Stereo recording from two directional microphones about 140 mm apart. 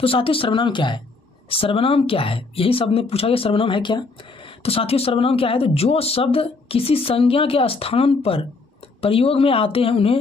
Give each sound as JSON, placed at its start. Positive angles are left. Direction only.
{"t": 0.0, "sound": "speech", "side_deg": 40}